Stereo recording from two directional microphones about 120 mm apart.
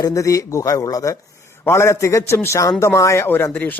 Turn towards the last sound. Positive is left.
turn(degrees=15)  # may be behind; listen again after turning